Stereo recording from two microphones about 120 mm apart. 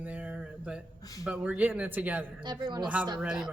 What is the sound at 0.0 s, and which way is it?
Music, 10° right (ahead or behind).